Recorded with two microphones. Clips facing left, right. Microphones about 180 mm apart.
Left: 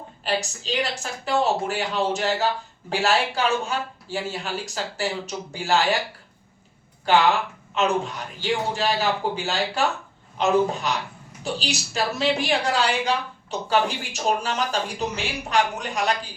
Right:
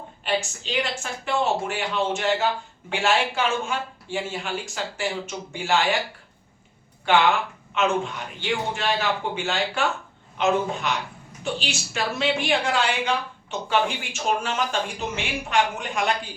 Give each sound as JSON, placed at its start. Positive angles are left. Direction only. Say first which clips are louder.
{"t": 0.3, "sound": "a woman's voice", "louder": "even", "side_deg": 35}
{"t": 7.1, "sound": "a woman's voice", "louder": "left 1 dB", "side_deg": 40}